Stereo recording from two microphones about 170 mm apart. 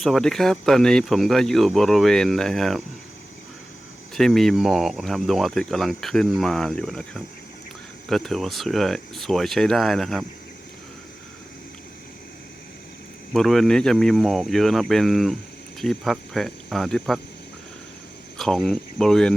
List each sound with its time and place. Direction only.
0.0 s speech: centre (ahead or behind)
4.1 s speech: centre (ahead or behind)
13.3 s speech: centre (ahead or behind)
18.3 s speech: centre (ahead or behind)